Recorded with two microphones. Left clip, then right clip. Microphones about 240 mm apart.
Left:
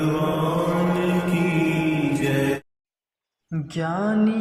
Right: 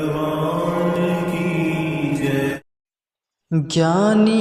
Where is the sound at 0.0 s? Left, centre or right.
Centre.